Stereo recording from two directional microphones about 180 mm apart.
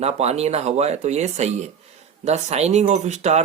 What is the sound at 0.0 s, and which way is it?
Speech, 35° right (ahead or behind).